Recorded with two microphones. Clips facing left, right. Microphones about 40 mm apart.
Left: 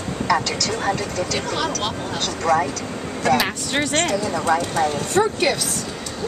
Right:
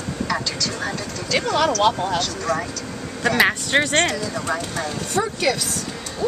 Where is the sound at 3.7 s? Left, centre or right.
Right.